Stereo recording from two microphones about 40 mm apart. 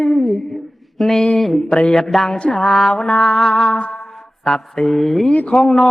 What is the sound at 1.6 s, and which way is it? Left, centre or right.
Music, centre.